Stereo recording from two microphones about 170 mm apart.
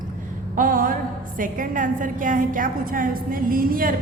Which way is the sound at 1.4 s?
50° right (ahead or behind).